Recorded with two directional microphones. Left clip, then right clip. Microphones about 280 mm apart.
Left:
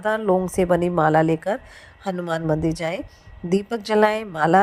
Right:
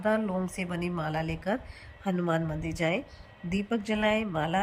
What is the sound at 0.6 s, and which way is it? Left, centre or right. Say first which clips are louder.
Speech: left 16 dB; left.